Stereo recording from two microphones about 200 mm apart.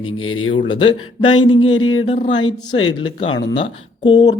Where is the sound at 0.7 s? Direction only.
25° left (ahead or behind).